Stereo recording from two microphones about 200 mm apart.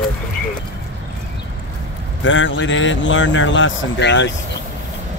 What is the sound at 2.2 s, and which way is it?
Speech, 70° left (ahead or behind).